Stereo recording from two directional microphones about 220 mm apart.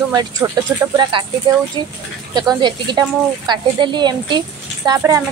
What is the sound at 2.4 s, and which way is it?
A woman's voice, 20° right (ahead or behind).